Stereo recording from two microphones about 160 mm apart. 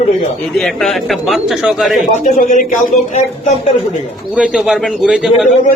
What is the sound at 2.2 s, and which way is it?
Speech, 55° left (ahead or behind).